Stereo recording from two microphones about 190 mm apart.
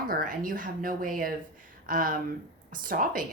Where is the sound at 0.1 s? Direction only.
45° right (ahead or behind).